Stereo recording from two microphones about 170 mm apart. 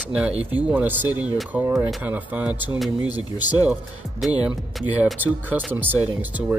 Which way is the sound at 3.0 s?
25° left (ahead or behind).